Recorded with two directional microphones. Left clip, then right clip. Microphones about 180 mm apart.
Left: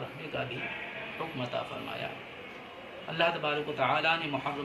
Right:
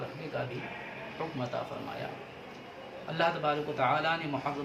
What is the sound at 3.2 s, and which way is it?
A man's voice, 20° right (ahead or behind).